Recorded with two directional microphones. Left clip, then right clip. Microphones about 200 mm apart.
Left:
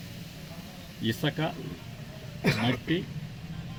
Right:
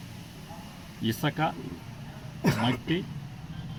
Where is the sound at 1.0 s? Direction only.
5° right (ahead or behind).